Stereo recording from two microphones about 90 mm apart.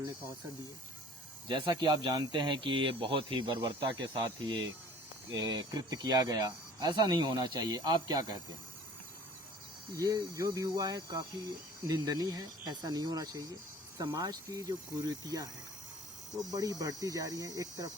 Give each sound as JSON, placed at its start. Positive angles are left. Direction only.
{"t": 1.5, "sound": "speech", "side_deg": -65}
{"t": 9.9, "sound": "speech", "side_deg": -45}
{"t": 16.5, "sound": "cricket", "side_deg": -45}